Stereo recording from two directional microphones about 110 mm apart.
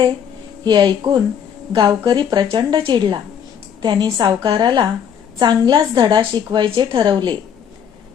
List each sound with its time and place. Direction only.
0.6 s a woman's voice: 40° right (ahead or behind)
6.7 s speech: 55° right (ahead or behind)